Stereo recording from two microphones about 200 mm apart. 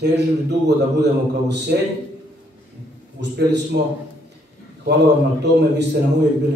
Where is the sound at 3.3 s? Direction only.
60° right (ahead or behind).